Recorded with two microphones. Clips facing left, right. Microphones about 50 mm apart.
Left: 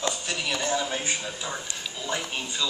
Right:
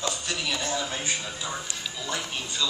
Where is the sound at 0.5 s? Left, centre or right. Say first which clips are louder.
Left 3 dB; left.